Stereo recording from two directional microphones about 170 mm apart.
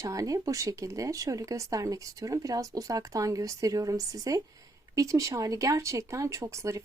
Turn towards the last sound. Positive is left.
turn(degrees=-20)  # may be behind; listen again after turning